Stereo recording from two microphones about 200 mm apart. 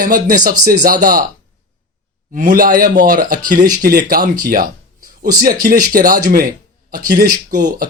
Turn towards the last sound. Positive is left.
turn(degrees=-40)  # may be behind; listen again after turning